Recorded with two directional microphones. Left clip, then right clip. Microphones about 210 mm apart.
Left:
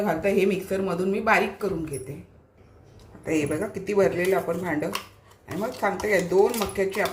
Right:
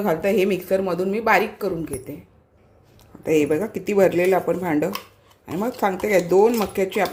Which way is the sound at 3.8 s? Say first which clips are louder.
Right 4 dB; 45° right (ahead or behind).